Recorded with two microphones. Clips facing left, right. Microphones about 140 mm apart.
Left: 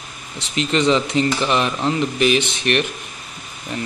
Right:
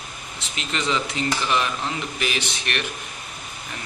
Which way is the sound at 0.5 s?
30° left (ahead or behind).